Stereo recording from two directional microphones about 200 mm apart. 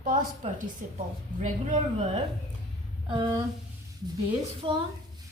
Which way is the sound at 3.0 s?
25° right (ahead or behind).